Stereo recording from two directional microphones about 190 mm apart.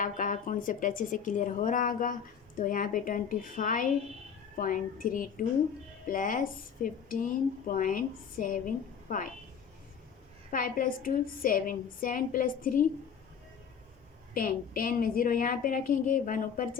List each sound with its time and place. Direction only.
0.0 s a woman's voice: 45° left (ahead or behind)
10.5 s a woman's voice: 45° left (ahead or behind)
14.3 s a woman's voice: 50° left (ahead or behind)